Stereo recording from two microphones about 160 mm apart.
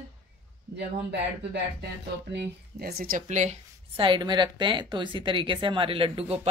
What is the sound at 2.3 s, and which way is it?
Speech, 85° right.